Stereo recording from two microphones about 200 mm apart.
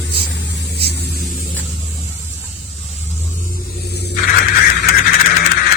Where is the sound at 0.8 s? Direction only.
55° left (ahead or behind).